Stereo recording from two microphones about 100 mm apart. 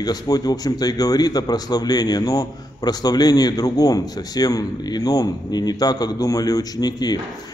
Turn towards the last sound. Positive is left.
turn(degrees=40)  # may be behind; listen again after turning